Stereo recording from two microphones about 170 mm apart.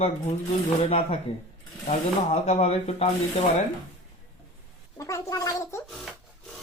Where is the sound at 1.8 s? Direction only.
40° left (ahead or behind).